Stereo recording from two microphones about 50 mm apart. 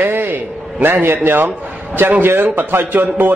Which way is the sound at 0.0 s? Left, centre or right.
Right.